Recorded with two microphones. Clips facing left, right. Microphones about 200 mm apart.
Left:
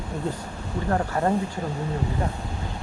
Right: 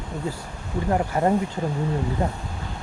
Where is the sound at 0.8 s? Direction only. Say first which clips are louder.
Right 2 dB; 15° right (ahead or behind).